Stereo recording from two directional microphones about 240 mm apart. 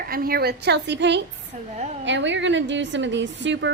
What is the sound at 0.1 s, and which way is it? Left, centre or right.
A woman's voice, right.